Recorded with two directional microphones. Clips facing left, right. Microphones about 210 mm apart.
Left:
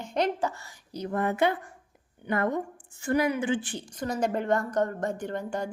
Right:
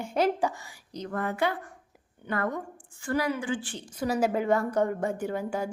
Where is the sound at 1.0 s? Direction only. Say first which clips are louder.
Left 3 dB; 20° left (ahead or behind).